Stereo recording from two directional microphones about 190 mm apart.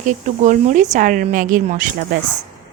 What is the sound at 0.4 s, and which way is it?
Speech, 40° right (ahead or behind).